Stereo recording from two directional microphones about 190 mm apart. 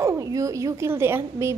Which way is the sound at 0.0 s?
15° right (ahead or behind).